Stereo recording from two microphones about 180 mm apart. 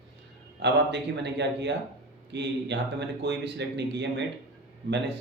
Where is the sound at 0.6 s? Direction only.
75° right (ahead or behind).